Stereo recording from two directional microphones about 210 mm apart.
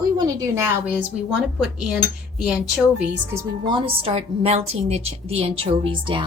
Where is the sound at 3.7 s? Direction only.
25° right (ahead or behind).